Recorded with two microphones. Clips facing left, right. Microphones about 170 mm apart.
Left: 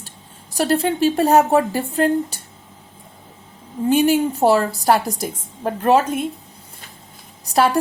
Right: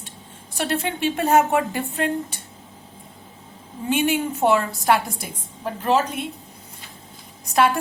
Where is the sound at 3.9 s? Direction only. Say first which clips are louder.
Left 5 dB; 40° left (ahead or behind).